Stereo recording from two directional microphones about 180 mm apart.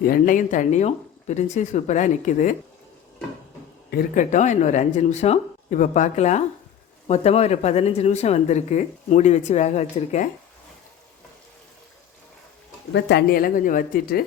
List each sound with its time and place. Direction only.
0.0 s speech: 50° left (ahead or behind)
3.9 s speech: 45° left (ahead or behind)
12.9 s speech: 75° left (ahead or behind); by 14.3 s 55° left (ahead or behind)